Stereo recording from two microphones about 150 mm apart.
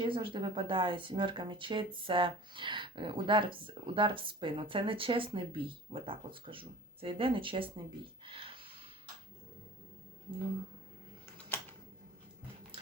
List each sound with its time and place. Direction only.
0.0 s speech: 35° right (ahead or behind)